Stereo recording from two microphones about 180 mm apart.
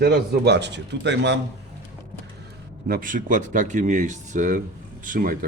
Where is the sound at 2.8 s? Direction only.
50° right (ahead or behind).